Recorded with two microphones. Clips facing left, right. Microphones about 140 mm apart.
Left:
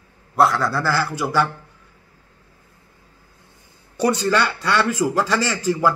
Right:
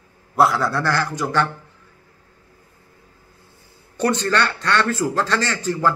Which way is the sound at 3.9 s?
10° left (ahead or behind).